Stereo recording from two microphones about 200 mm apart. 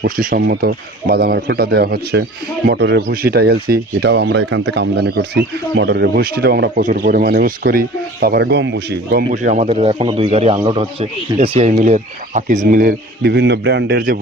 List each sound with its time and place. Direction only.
0.0 s speech: 45° right (ahead or behind)
9.3 s speech: 40° right (ahead or behind)